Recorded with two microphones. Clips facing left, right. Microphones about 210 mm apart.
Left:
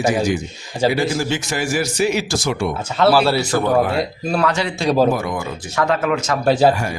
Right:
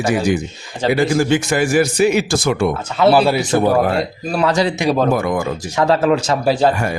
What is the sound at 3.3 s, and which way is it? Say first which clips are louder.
Speech: right 2 dB; 15° right (ahead or behind).